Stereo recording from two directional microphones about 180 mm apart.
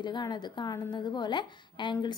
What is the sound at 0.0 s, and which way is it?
A woman's voice, 25° left (ahead or behind).